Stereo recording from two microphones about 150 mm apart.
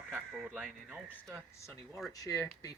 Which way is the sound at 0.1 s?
10° right (ahead or behind).